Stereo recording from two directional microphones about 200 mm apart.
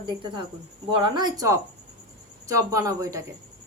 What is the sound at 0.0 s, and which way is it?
Speech, 25° right (ahead or behind).